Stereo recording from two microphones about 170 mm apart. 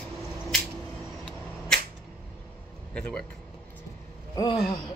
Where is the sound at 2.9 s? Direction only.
5° left (ahead or behind).